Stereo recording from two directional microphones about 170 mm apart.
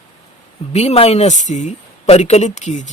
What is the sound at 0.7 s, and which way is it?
Speech, 40° left (ahead or behind).